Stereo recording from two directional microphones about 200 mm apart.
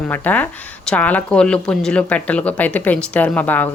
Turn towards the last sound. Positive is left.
turn(degrees=10)  # may be behind; listen again after turning